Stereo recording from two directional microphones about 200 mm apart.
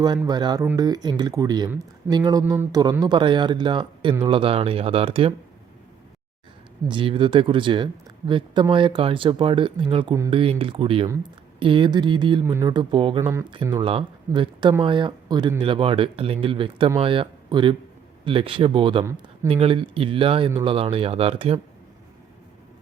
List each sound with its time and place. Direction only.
0.3 s speech: 20° right (ahead or behind)
6.8 s speech: 25° right (ahead or behind)